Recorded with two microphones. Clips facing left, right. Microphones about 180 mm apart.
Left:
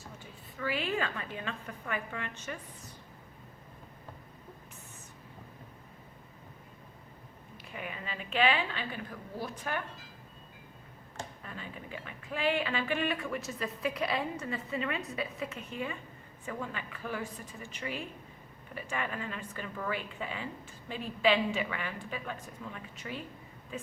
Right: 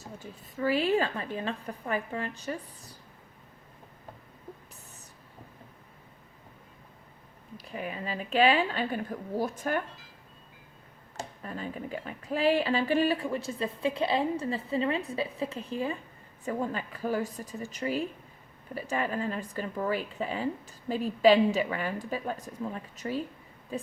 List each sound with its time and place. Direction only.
0.2 s speech: 40° right (ahead or behind)
7.5 s speech: 35° right (ahead or behind)
11.2 s speech: 40° right (ahead or behind)